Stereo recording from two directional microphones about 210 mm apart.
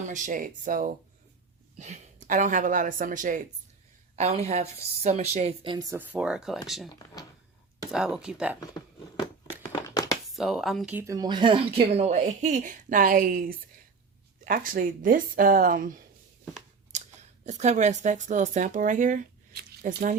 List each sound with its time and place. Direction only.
0.1 s a woman's voice: 40° right (ahead or behind); by 6.6 s 5° right (ahead or behind)
7.9 s speech: 5° right (ahead or behind)
9.7 s a sound: 20° left (ahead or behind)
10.2 s a woman's voice: centre (ahead or behind); by 16.0 s 40° right (ahead or behind)
16.9 s scissors: 35° right (ahead or behind)
17.4 s speech: 35° right (ahead or behind)